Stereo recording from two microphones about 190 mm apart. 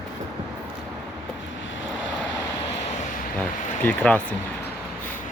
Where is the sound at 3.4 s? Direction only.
5° left (ahead or behind).